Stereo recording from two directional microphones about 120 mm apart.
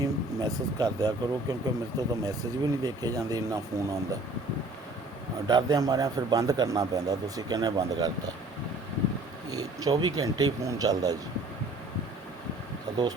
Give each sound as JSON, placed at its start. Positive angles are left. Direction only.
{"t": 0.0, "sound": "speech", "side_deg": -30}
{"t": 5.5, "sound": "speech", "side_deg": -35}
{"t": 9.8, "sound": "speech", "side_deg": -30}